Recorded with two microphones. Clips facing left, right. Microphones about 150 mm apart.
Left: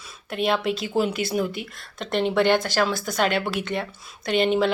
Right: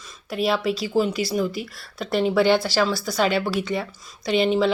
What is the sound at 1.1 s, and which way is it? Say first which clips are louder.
Speech: right 2 dB; 50° left (ahead or behind).